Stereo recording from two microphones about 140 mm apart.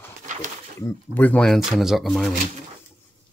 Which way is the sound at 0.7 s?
15° left (ahead or behind).